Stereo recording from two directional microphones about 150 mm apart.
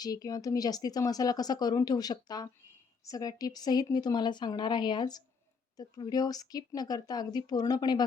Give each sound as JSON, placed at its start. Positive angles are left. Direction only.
{"t": 0.0, "sound": "speech", "side_deg": 25}